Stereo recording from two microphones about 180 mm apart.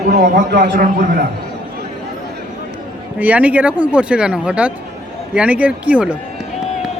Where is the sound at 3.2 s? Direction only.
10° right (ahead or behind).